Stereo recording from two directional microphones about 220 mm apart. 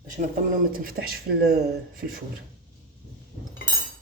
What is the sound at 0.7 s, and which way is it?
Speech, 40° right (ahead or behind).